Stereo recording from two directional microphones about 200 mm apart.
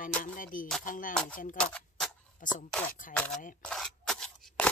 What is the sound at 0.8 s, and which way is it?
Speech, 40° left (ahead or behind).